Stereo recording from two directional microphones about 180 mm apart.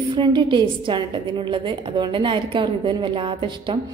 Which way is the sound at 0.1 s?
25° right (ahead or behind).